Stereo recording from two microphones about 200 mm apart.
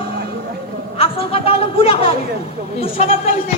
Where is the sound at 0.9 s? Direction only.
30° left (ahead or behind).